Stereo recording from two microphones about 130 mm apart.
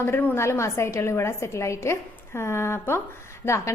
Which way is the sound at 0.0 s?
15° left (ahead or behind).